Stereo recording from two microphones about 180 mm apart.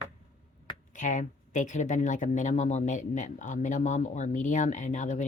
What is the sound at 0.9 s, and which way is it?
Speech, 45° left (ahead or behind).